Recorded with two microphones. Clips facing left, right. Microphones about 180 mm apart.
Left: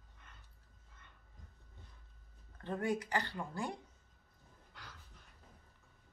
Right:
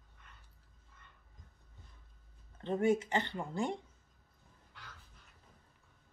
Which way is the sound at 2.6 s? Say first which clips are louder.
Right 6 dB; 25° right (ahead or behind).